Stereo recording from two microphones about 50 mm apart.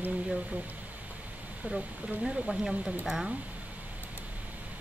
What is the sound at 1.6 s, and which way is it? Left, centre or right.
Speech, right.